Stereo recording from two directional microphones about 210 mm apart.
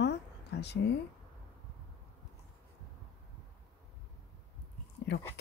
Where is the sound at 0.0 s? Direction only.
55° left (ahead or behind).